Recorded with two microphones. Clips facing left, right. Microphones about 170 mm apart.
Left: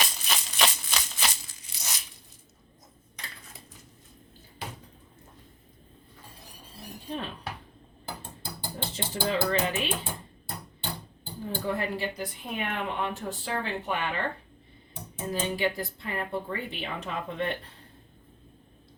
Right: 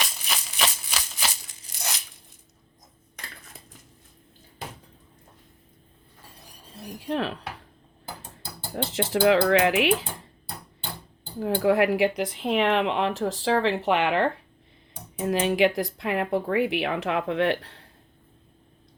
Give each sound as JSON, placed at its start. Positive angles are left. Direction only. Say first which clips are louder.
{"t": 0.6, "sound": "a sound", "louder": "left 1 dB", "side_deg": 0}
{"t": 1.7, "sound": "tearing", "louder": "right 6 dB", "side_deg": -60}
{"t": 7.1, "sound": "speech", "louder": "right 8 dB", "side_deg": -90}
{"t": 8.7, "sound": "speech", "louder": "right 10 dB", "side_deg": -90}
{"t": 11.3, "sound": "speech", "louder": "right 10 dB", "side_deg": -90}